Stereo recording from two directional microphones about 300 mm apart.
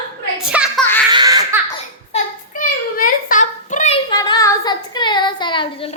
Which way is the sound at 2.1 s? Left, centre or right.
Left.